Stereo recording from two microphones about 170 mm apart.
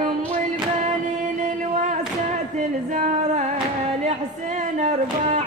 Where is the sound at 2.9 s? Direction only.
45° right (ahead or behind).